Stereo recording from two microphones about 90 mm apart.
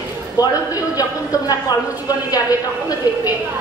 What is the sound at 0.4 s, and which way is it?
Speech, 45° left (ahead or behind).